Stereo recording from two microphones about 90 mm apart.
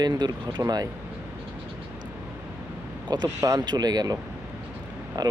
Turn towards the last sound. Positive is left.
turn(degrees=-45)  # may be behind; listen again after turning